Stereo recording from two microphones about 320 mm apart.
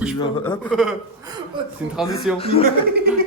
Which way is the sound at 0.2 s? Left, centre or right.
Centre.